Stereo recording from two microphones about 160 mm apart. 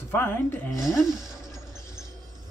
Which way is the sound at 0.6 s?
Centre (ahead or behind).